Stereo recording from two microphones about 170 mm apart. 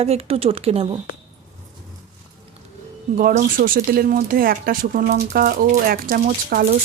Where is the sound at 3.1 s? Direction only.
55° right (ahead or behind).